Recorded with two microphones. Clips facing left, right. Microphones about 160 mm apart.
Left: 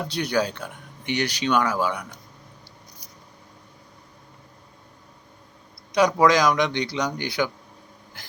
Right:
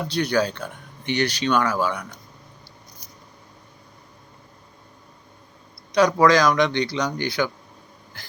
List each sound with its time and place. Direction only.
0.1 s speech: 15° left (ahead or behind)
5.9 s speech: 15° left (ahead or behind)